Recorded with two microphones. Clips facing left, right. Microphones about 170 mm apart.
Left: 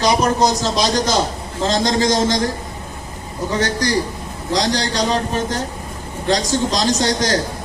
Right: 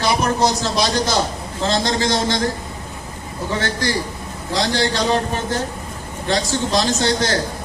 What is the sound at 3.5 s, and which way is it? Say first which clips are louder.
Speech: left 3 dB; 40° left (ahead or behind).